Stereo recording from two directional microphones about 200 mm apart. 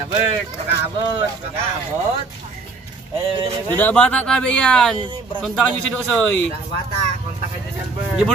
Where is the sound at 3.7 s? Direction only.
5° left (ahead or behind).